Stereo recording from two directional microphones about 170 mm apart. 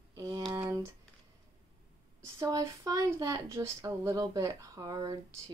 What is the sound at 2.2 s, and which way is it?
Speech, 20° right (ahead or behind).